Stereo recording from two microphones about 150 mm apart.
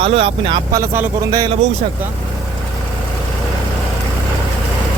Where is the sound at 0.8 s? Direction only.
15° right (ahead or behind).